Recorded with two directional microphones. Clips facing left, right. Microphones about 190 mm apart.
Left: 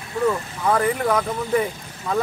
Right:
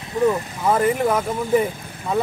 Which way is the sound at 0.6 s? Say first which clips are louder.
Right 2 dB; 10° right (ahead or behind).